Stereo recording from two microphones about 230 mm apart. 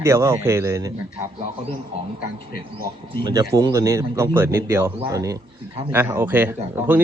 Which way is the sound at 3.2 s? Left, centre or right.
Centre.